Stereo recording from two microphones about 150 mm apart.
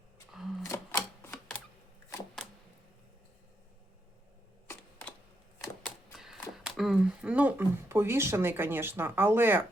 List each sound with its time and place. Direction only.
0.6 s typewriter: 20° left (ahead or behind)
1.3 s typewriter: 5° left (ahead or behind)
6.1 s speech: 5° right (ahead or behind)